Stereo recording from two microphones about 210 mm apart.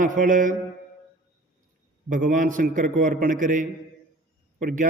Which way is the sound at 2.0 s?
40° right (ahead or behind).